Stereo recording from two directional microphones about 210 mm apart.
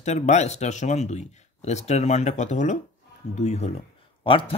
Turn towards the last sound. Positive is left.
turn(degrees=25)  # may be behind; listen again after turning